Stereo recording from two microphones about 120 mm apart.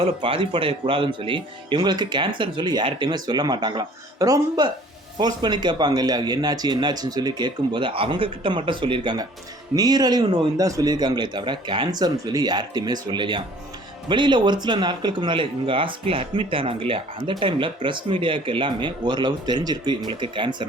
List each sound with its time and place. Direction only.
0.0 s speech: 45° right (ahead or behind)